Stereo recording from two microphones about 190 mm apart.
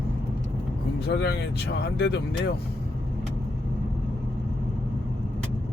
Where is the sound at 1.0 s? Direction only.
55° left (ahead or behind).